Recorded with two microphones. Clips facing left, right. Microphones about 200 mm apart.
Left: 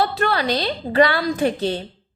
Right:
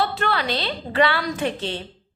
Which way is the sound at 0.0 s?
40° left (ahead or behind).